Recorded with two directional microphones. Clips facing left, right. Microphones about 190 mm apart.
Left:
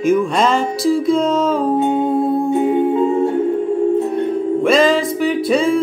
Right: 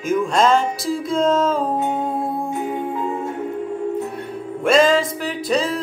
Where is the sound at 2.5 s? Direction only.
30° left (ahead or behind).